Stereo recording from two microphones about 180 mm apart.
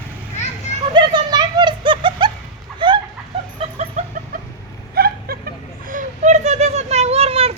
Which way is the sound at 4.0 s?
40° right (ahead or behind).